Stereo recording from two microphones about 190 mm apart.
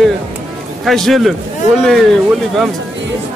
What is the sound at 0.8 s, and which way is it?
Speech, centre (ahead or behind).